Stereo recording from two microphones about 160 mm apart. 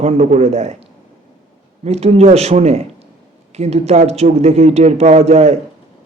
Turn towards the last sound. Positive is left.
turn(degrees=-45)  # may be behind; listen again after turning